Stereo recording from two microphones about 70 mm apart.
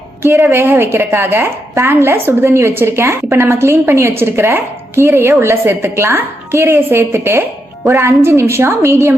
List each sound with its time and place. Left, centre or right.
0.2 s a woman's voice: right